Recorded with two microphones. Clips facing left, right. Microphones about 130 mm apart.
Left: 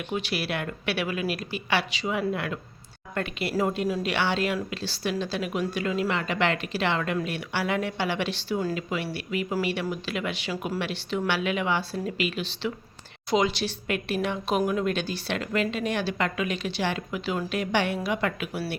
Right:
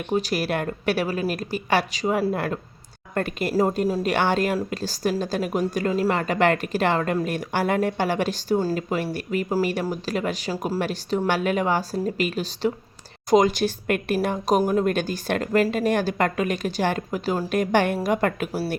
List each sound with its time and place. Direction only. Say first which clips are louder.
0.1 s a woman's voice: right 7 dB; 40° right (ahead or behind)
4.0 s a woman's voice: right 5 dB; 45° right (ahead or behind)